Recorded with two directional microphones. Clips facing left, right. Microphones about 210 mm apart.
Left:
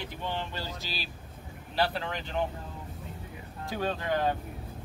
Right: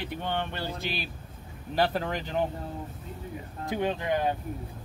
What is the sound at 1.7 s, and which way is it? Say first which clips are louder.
Speech: right 3 dB; 45° right (ahead or behind).